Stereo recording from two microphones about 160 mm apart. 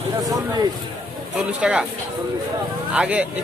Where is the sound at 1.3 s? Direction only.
5° right (ahead or behind).